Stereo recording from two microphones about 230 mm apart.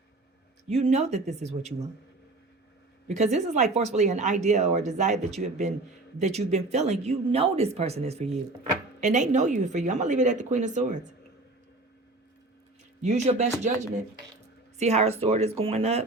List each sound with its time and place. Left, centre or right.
0.7 s speech: right
3.1 s speech: right
13.0 s speech: right
14.8 s speech: right